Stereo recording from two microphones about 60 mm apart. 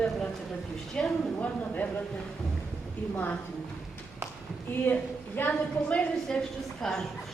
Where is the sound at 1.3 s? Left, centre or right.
Left.